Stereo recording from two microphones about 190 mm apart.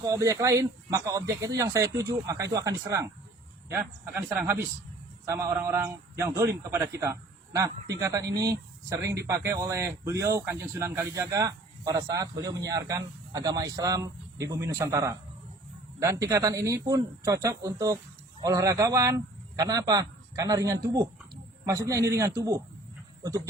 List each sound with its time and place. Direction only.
0.0 s a man's voice: 15° right (ahead or behind)